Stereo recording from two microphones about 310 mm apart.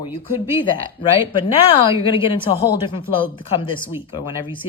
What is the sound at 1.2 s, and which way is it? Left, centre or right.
Speech, centre.